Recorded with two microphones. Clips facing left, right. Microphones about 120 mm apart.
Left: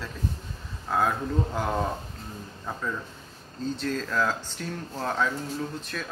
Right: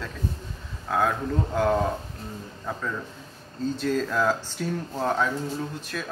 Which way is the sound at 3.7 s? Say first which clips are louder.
Right 3 dB; 5° right (ahead or behind).